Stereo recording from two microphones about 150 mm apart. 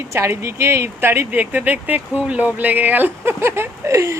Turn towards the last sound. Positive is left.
turn(degrees=-20)  # may be behind; listen again after turning